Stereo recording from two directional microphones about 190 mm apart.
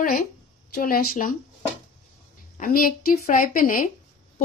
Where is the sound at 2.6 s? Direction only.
50° left (ahead or behind).